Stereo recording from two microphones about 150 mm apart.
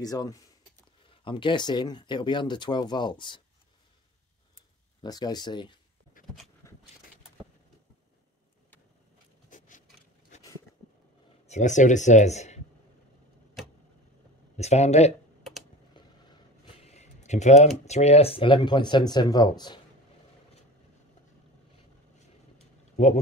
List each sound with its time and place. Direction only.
0.0 s speech: 25° left (ahead or behind)
5.0 s speech: 25° left (ahead or behind)
6.2 s a sound: 70° left (ahead or behind)
6.6 s vehicle: 20° left (ahead or behind)
9.5 s a sound: 60° left (ahead or behind)
11.4 s speech: 50° left (ahead or behind)
14.6 s speech: 45° left (ahead or behind)
16.0 s vehicle: 30° left (ahead or behind)
16.8 s computer keyboard: 45° left (ahead or behind)
17.8 s speech: 45° left (ahead or behind); by 19.8 s 30° left (ahead or behind)